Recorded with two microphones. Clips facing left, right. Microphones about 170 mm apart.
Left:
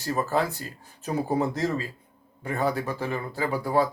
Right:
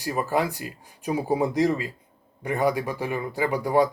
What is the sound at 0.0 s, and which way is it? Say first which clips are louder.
Speech: right 1 dB; 15° right (ahead or behind).